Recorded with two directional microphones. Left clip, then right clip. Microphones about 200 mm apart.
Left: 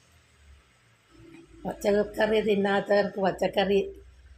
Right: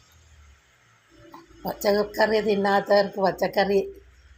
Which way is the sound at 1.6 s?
15° right (ahead or behind).